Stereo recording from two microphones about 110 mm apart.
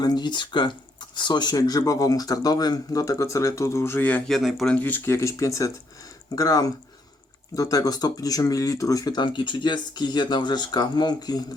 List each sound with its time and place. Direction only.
0.0 s speech: 40° left (ahead or behind); by 4.2 s 15° left (ahead or behind)
4.3 s speech: centre (ahead or behind)
4.8 s speech: 20° left (ahead or behind); by 11.4 s 40° left (ahead or behind)